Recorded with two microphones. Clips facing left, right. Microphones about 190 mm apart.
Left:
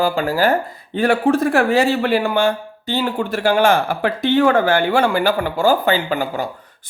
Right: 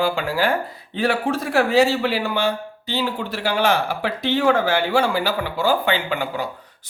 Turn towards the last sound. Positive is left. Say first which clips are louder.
# left 3 dB
turn(degrees=40)  # may be behind; listen again after turning